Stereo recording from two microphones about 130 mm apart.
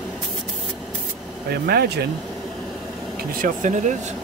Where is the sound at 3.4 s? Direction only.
70° right (ahead or behind).